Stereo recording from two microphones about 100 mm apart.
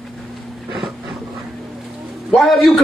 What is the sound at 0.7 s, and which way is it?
Boat, centre (ahead or behind).